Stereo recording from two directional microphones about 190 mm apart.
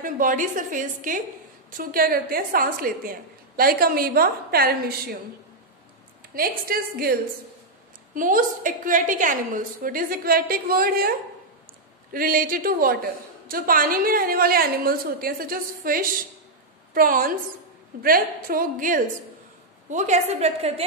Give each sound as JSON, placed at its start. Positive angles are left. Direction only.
{"t": 0.0, "sound": "a woman's voice", "side_deg": -45}
{"t": 6.3, "sound": "a woman's voice", "side_deg": -50}